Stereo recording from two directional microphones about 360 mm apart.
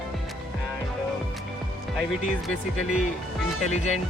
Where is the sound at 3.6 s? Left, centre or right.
Centre.